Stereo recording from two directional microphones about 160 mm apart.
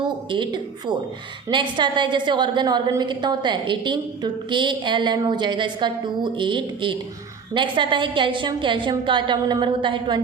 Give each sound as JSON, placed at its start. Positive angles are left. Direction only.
{"t": 0.0, "sound": "a woman's voice", "side_deg": -30}